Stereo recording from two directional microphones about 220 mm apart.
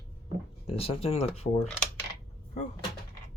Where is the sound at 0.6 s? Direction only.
25° left (ahead or behind).